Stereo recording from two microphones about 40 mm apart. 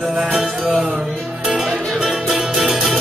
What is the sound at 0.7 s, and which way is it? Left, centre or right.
Music, centre.